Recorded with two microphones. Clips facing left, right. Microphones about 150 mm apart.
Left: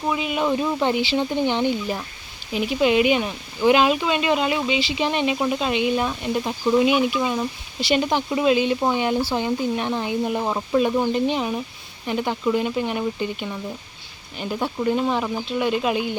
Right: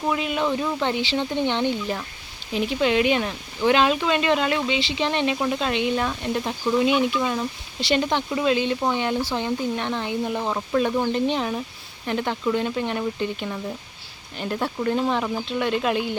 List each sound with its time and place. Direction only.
0.1 s speech: 5° left (ahead or behind)